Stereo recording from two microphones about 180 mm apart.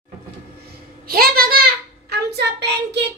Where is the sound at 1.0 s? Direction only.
55° right (ahead or behind).